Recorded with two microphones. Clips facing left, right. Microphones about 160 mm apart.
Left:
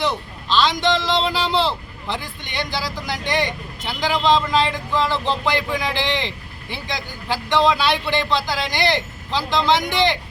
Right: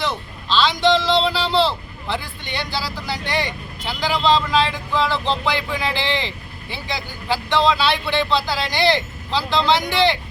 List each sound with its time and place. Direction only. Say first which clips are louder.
0.0 s speech: left 2 dB; 15° left (ahead or behind)